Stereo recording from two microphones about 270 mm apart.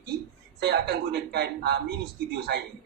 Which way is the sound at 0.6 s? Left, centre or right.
Right.